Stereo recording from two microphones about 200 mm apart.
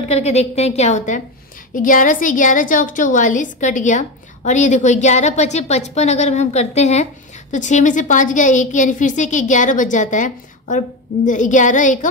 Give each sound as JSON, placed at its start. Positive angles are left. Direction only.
{"t": 0.1, "sound": "a woman's voice", "side_deg": 35}